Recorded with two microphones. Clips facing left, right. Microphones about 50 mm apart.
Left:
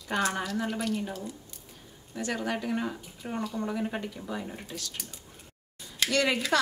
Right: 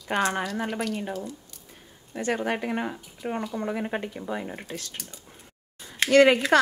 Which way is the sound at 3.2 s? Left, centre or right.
Right.